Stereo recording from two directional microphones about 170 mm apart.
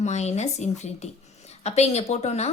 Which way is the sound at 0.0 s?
40° left (ahead or behind).